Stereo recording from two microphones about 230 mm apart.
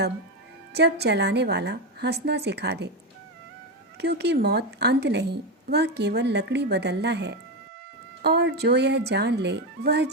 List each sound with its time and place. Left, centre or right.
0.7 s a woman's voice: right
3.9 s a woman's voice: right